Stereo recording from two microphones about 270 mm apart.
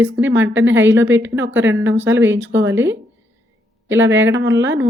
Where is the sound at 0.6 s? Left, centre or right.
Right.